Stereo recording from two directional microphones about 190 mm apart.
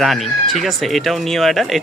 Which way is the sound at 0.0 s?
Centre (ahead or behind).